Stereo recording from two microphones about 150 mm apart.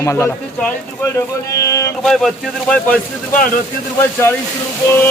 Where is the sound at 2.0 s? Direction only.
Centre (ahead or behind).